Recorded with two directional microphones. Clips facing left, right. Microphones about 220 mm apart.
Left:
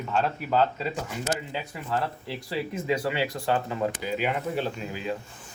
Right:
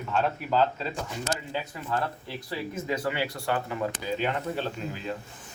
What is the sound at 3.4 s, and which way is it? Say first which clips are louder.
Speech: left 2 dB; 25° left (ahead or behind).